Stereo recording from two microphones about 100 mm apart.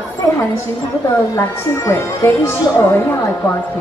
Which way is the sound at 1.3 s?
25° left (ahead or behind).